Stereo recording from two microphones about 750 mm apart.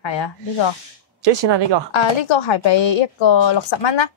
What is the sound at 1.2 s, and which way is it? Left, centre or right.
Speech, right.